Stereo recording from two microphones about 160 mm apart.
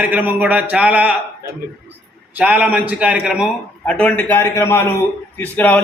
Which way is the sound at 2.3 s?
10° right (ahead or behind).